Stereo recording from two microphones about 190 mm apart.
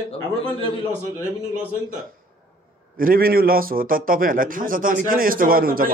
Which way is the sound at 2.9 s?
50° right (ahead or behind).